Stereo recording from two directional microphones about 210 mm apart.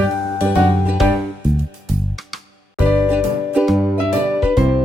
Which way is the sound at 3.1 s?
5° right (ahead or behind).